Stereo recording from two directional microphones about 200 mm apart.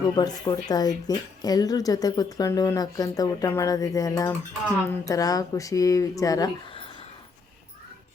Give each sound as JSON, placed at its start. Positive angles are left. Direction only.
{"t": 0.2, "sound": "speech", "side_deg": 20}